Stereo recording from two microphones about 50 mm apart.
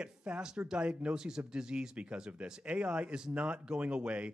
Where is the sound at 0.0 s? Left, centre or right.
Right.